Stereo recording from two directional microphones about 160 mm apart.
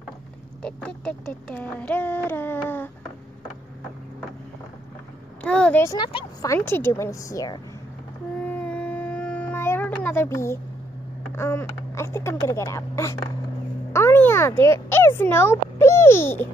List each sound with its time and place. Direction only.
0.6 s speech: 5° left (ahead or behind)
5.4 s a child's voice: 5° left (ahead or behind)
5.9 s a woman's voice: 25° left (ahead or behind)
8.4 s a sound: 5° left (ahead or behind)
11.3 s a child's voice: 15° left (ahead or behind)